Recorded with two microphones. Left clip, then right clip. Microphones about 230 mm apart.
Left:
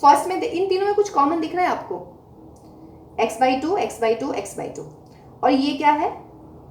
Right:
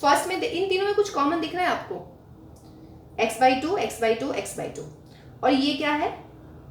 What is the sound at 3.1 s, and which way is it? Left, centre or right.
A woman's voice, right.